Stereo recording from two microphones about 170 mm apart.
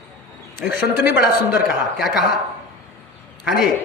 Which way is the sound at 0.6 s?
75° left (ahead or behind).